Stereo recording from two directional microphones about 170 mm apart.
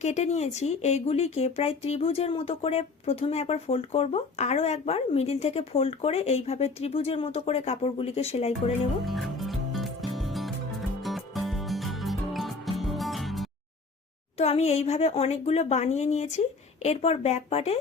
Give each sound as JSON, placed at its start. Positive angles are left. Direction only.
{"t": 0.0, "sound": "speech", "side_deg": 40}
{"t": 9.0, "sound": "music", "side_deg": 0}
{"t": 14.3, "sound": "speech", "side_deg": 35}